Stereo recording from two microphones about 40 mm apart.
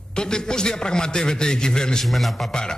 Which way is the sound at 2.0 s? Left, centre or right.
Centre.